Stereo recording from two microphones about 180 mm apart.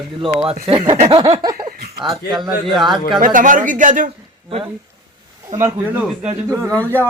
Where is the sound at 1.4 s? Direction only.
20° right (ahead or behind).